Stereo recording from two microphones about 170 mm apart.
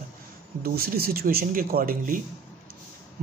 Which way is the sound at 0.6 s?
60° right (ahead or behind).